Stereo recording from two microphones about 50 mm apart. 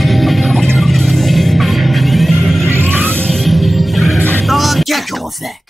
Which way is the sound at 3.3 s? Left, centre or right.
Centre.